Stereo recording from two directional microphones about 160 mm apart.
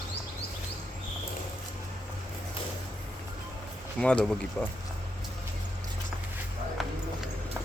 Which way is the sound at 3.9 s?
5° left (ahead or behind).